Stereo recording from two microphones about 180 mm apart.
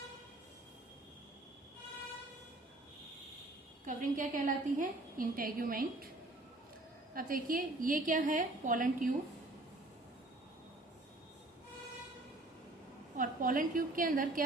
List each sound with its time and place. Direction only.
3.8 s a woman's voice: 45° right (ahead or behind)
7.1 s a woman's voice: 50° right (ahead or behind)
13.1 s a woman's voice: 50° right (ahead or behind)